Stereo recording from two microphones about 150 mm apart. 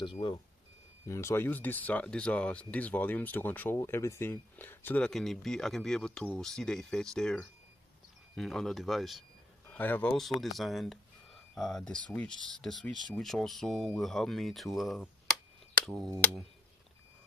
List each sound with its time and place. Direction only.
0.0 s speech: 30° left (ahead or behind)
1.0 s speech: 20° left (ahead or behind); by 9.2 s centre (ahead or behind)
9.7 s speech: 10° left (ahead or behind)